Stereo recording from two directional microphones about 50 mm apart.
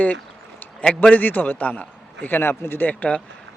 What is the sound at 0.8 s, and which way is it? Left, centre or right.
Speech, centre.